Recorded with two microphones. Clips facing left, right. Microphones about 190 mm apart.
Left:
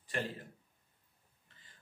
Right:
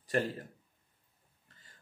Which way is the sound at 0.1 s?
40° right (ahead or behind).